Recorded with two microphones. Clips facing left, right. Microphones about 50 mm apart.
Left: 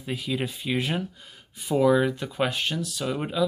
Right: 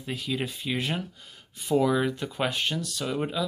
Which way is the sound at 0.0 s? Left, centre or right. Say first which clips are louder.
Left 2 dB; centre.